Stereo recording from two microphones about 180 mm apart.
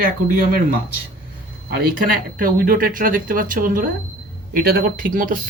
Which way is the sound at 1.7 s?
50° right (ahead or behind).